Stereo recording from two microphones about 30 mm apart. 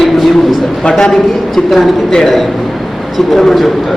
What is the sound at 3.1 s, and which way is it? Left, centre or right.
Speech, centre.